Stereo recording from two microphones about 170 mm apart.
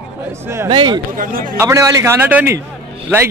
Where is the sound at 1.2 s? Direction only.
55° right (ahead or behind).